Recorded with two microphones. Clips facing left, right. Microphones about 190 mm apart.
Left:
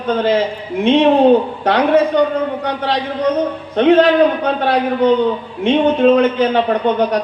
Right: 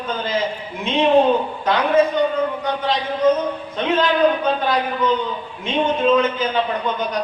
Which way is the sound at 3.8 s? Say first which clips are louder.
Left 8 dB; 65° left (ahead or behind).